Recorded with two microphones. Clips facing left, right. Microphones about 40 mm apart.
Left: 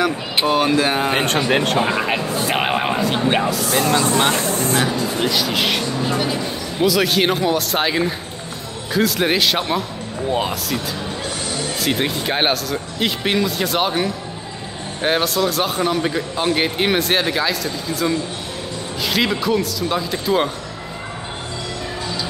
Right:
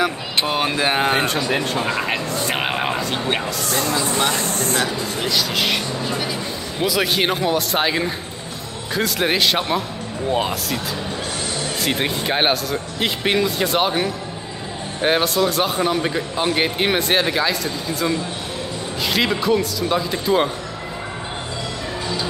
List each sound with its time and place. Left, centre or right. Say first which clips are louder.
0.5 s speech: left 4 dB; centre
1.2 s speech: left 3 dB; left
2.0 s a man's voice: left 2 dB; centre
4.2 s speech: left 3 dB; left
5.1 s a man's voice: left 2 dB; centre
11.8 s a man's voice: left 1 dB; centre